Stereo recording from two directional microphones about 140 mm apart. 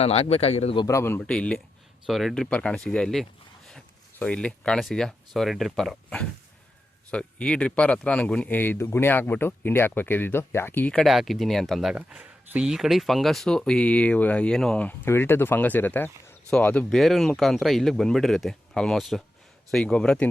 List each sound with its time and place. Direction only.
0.0 s a man's voice: 50° left (ahead or behind)
0.9 s speech: 20° left (ahead or behind)
1.2 s speech: 5° left (ahead or behind)
10.9 s speech: centre (ahead or behind)